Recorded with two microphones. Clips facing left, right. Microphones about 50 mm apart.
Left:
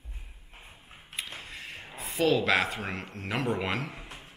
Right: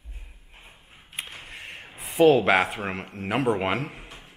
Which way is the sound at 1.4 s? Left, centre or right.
Centre.